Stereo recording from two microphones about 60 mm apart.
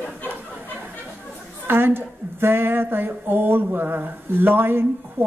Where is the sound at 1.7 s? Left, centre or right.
Right.